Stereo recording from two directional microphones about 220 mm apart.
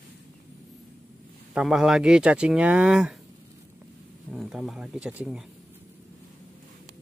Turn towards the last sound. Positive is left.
turn(degrees=-5)  # may be behind; listen again after turning